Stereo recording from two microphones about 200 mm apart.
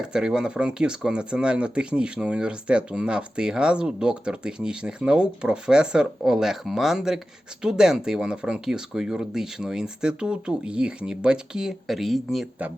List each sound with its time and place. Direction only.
0.0 s speech: 5° right (ahead or behind)